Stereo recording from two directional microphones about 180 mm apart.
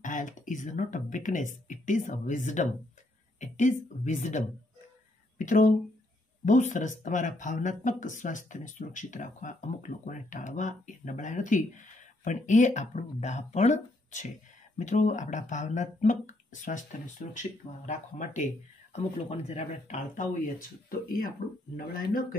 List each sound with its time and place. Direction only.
0.0 s speech: 45° left (ahead or behind)
21.7 s speech: 55° left (ahead or behind)